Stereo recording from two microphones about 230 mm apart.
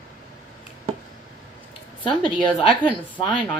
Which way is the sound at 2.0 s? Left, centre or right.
Left.